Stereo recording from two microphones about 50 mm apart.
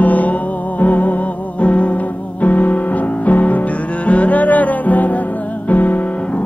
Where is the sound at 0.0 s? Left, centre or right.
Left.